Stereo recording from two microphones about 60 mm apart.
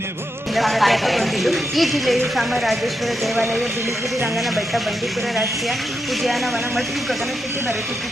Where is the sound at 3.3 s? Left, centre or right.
Right.